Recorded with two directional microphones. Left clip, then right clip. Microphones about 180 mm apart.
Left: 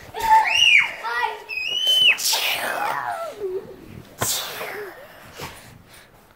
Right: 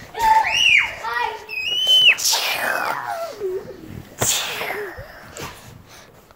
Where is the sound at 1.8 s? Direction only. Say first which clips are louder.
Right 3 dB; 10° right (ahead or behind).